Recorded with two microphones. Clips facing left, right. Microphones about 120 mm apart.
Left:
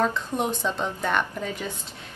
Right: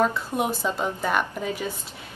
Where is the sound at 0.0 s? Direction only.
10° right (ahead or behind).